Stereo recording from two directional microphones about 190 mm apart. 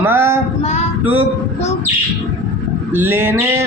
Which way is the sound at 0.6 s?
35° left (ahead or behind).